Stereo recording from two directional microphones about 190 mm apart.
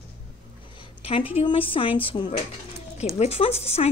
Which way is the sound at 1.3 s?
30° left (ahead or behind).